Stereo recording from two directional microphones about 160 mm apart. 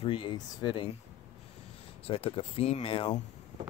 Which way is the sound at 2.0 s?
35° left (ahead or behind).